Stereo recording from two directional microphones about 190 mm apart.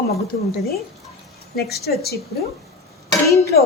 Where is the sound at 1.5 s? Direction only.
55° left (ahead or behind).